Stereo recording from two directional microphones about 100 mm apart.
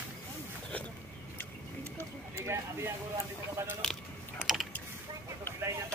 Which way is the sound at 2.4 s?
25° right (ahead or behind).